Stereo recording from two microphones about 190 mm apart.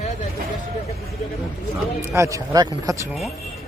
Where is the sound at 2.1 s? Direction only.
15° right (ahead or behind).